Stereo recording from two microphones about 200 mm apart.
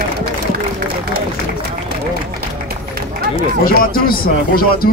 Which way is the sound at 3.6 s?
45° left (ahead or behind).